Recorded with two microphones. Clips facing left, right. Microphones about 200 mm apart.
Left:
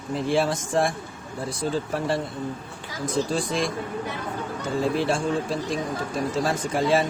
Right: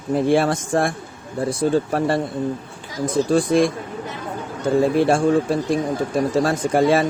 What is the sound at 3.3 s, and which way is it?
Speech, 55° right (ahead or behind).